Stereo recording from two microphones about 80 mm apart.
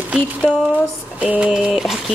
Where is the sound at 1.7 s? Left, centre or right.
Centre.